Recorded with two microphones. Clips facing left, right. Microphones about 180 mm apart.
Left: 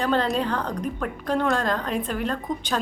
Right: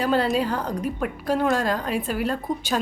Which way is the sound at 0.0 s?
5° right (ahead or behind).